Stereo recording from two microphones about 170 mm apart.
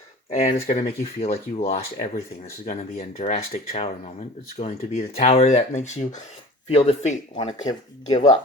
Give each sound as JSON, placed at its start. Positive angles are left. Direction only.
{"t": 0.3, "sound": "speech", "side_deg": 45}